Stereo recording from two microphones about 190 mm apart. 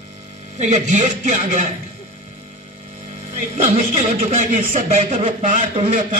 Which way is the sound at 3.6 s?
40° right (ahead or behind).